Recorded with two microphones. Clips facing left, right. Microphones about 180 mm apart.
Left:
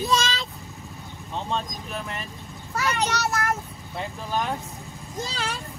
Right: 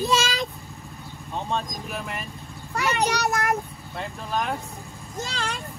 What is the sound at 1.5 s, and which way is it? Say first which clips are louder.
Speech: right 1 dB; 5° right (ahead or behind).